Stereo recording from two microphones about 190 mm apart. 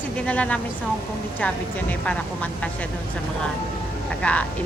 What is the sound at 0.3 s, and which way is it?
Speech, 5° left (ahead or behind).